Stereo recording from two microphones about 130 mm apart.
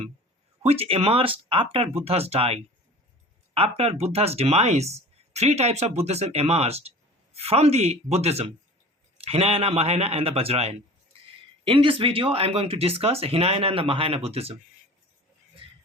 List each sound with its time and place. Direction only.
0.6 s speech: 50° right (ahead or behind)
11.6 s speech: 40° right (ahead or behind)